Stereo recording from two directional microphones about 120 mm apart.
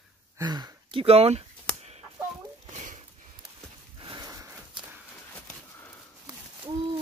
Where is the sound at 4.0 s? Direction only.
40° right (ahead or behind).